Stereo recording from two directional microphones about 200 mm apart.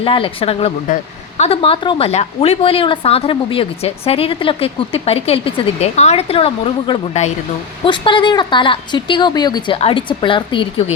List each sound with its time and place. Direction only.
0.0 s a woman's voice: 25° left (ahead or behind)